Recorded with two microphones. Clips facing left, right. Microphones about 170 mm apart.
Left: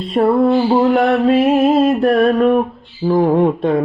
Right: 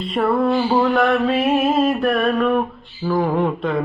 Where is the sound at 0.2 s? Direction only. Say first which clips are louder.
Left 5 dB; 25° left (ahead or behind).